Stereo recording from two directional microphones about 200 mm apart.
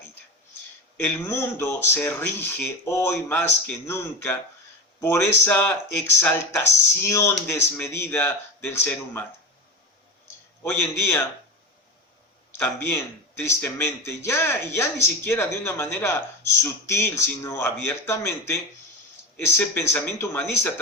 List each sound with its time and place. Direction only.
0.9 s a man's voice: 10° left (ahead or behind)
10.6 s a man's voice: 10° left (ahead or behind)
12.5 s a man's voice: 10° left (ahead or behind)